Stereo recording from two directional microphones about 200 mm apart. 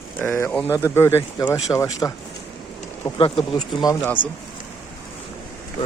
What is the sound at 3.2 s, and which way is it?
Speech, 25° left (ahead or behind).